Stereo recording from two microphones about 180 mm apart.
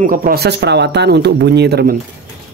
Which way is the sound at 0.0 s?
50° right (ahead or behind).